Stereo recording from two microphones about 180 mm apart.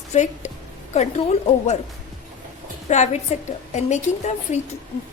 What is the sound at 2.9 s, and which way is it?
A woman's voice, 40° left (ahead or behind).